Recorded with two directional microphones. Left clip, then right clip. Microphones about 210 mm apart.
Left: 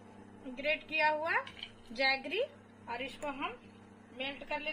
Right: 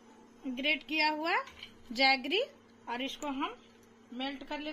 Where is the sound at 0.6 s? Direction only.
40° right (ahead or behind).